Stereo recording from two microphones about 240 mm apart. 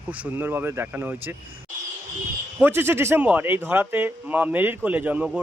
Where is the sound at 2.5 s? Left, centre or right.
Centre.